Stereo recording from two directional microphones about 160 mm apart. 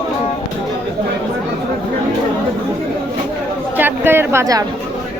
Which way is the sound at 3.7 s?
15° right (ahead or behind).